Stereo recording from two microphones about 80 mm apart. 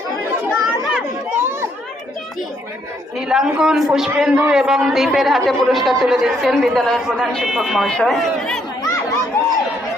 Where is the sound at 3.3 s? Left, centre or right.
Centre.